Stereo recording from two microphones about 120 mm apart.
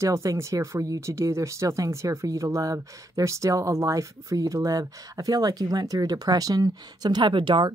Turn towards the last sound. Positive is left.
turn(degrees=-40)  # may be behind; listen again after turning